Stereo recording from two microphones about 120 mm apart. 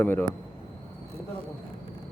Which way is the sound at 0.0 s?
15° left (ahead or behind).